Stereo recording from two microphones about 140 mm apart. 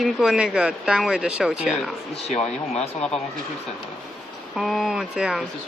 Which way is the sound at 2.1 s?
50° left (ahead or behind).